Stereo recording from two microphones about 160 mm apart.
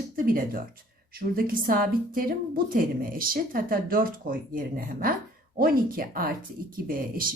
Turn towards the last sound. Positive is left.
turn(degrees=-60)  # may be behind; listen again after turning